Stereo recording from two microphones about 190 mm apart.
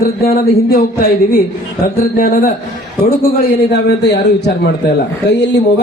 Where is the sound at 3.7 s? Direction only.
60° left (ahead or behind).